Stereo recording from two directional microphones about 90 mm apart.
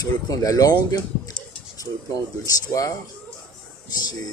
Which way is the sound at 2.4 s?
40° left (ahead or behind).